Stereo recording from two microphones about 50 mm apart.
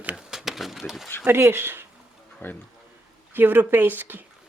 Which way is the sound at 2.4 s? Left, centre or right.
Left.